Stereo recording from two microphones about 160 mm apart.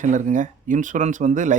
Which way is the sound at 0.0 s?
55° right (ahead or behind).